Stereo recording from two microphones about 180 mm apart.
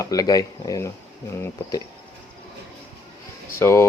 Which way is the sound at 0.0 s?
20° left (ahead or behind).